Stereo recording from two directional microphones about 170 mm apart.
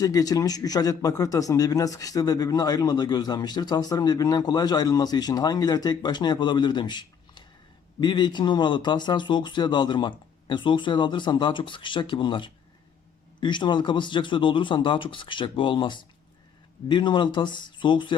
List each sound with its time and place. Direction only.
0.0 s speech: 20° left (ahead or behind)